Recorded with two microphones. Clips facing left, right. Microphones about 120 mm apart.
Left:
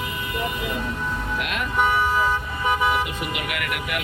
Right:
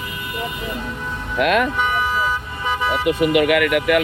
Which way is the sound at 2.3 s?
10° left (ahead or behind).